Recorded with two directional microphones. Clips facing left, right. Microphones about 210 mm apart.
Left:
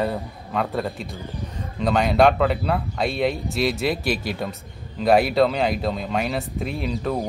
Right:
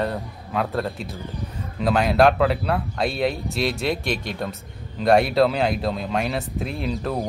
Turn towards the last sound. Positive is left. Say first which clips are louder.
# left 1 dB
turn(degrees=0)  # may be behind; listen again after turning